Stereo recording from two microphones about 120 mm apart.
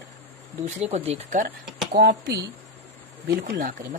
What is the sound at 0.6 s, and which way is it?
Speech, 70° right (ahead or behind).